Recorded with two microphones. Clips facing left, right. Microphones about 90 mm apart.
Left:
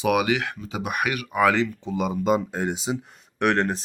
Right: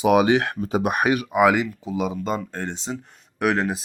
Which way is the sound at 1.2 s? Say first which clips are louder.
Even; 15° right (ahead or behind).